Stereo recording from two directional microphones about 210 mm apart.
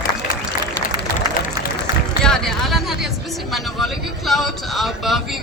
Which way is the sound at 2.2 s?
Centre (ahead or behind).